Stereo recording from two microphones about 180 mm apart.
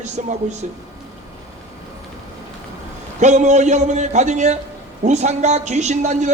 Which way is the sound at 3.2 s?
40° right (ahead or behind).